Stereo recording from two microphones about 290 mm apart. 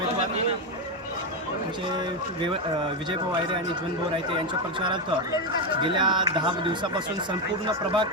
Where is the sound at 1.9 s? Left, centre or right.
Centre.